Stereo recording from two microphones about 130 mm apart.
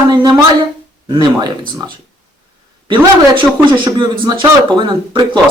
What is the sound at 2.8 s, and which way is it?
Speech, 40° right (ahead or behind).